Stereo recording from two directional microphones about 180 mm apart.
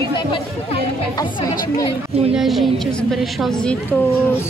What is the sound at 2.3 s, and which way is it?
A woman's voice, centre (ahead or behind).